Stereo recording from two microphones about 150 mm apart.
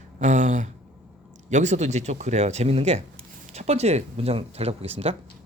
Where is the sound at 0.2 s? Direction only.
55° right (ahead or behind).